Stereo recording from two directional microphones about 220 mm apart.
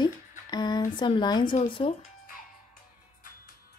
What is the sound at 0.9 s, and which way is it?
Speech, 20° left (ahead or behind).